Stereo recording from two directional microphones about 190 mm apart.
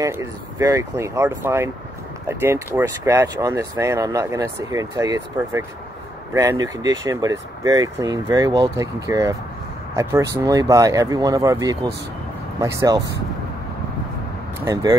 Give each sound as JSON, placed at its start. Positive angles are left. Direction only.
{"t": 0.0, "sound": "speech", "side_deg": -15}
{"t": 14.6, "sound": "speech", "side_deg": -20}